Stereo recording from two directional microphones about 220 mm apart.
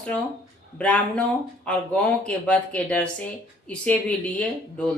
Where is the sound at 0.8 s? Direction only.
5° left (ahead or behind).